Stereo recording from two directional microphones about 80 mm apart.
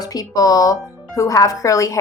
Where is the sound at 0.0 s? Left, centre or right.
Left.